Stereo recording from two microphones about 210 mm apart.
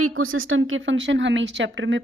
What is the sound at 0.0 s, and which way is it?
A woman's voice, 75° right (ahead or behind).